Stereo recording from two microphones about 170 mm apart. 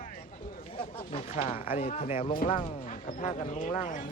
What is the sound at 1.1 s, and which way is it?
Speech, 45° left (ahead or behind).